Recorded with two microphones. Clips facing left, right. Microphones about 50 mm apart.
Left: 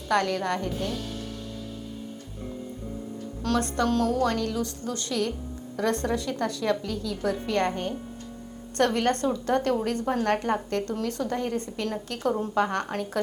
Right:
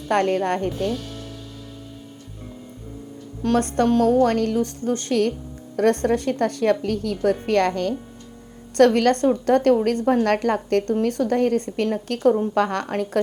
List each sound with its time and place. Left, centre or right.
0.1 s speech: right
3.5 s a woman's voice: right
8.8 s a woman's voice: right